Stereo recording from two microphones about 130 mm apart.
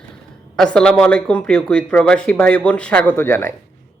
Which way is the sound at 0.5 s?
5° left (ahead or behind).